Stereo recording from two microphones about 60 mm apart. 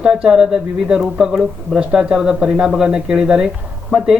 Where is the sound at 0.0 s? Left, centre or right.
Centre.